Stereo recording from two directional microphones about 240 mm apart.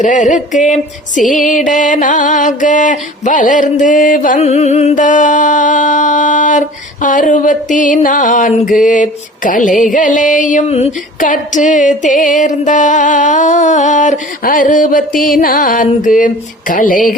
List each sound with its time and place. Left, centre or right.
0.0 s music: left